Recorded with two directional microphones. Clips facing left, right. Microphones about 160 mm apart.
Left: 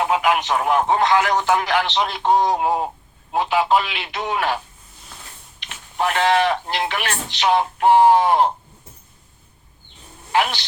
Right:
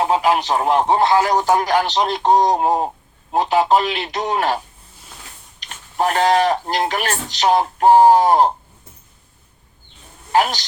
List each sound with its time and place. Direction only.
0.0 s speech: 35° right (ahead or behind)
10.3 s speech: 40° right (ahead or behind)